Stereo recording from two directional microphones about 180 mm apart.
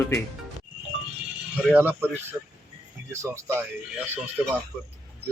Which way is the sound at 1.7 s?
10° right (ahead or behind).